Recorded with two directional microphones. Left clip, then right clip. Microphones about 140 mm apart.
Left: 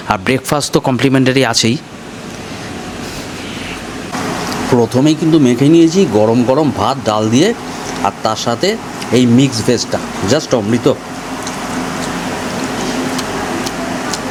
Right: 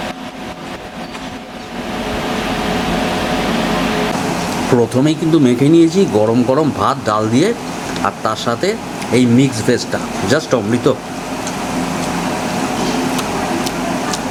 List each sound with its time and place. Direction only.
4.8 s speech: 35° left (ahead or behind)